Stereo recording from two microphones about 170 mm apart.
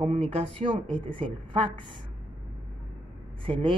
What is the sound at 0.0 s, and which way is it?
Speech, 40° right (ahead or behind).